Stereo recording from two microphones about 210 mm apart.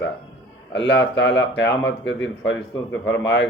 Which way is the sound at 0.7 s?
60° left (ahead or behind).